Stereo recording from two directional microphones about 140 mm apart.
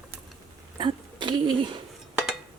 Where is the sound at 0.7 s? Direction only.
35° right (ahead or behind).